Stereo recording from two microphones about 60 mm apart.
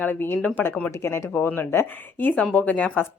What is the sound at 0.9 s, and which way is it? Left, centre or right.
Speech, left.